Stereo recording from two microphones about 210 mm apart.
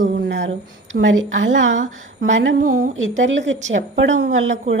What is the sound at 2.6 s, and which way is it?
Speech, 40° right (ahead or behind).